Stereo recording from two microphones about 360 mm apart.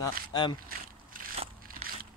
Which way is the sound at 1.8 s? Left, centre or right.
Centre.